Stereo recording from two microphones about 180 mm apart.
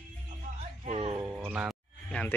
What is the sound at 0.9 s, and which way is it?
Speech, 35° right (ahead or behind).